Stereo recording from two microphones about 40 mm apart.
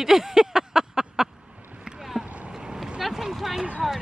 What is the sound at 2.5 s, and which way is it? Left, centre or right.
Vehicle, centre.